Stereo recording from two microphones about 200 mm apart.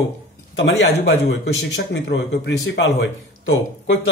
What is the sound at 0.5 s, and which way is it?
A man's voice, 60° left (ahead or behind).